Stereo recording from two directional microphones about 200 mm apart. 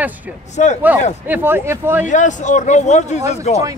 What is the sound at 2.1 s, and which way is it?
A man's voice, 40° left (ahead or behind).